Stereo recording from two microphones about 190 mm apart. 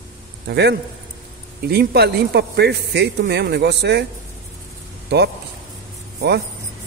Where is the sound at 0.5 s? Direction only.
60° right (ahead or behind).